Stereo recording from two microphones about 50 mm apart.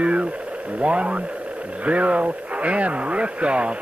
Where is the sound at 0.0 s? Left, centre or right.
Right.